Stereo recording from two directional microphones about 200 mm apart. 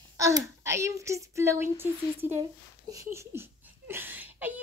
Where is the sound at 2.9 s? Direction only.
15° right (ahead or behind).